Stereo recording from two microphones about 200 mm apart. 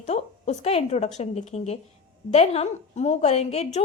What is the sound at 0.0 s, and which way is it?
A woman's voice, 35° left (ahead or behind).